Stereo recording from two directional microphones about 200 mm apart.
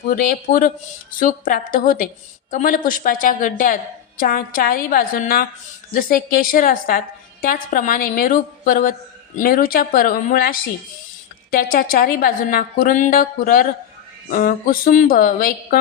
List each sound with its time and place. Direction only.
0.1 s a woman's voice: 45° left (ahead or behind)